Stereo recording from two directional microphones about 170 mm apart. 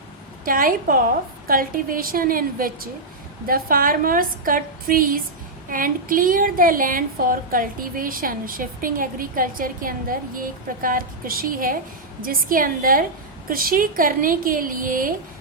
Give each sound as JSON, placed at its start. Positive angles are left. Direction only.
{"t": 0.4, "sound": "a woman's voice", "side_deg": -55}